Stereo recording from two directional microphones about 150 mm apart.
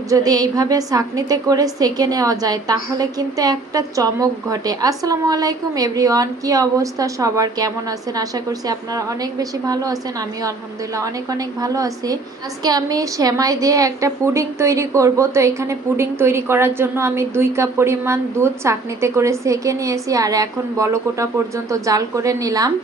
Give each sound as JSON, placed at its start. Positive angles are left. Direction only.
{"t": 0.1, "sound": "a woman's voice", "side_deg": -25}
{"t": 11.0, "sound": "a woman's voice", "side_deg": -25}